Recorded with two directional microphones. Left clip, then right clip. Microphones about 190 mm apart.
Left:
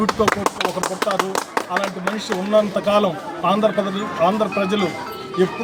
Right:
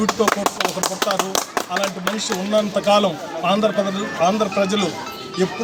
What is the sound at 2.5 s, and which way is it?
Speech, 5° left (ahead or behind).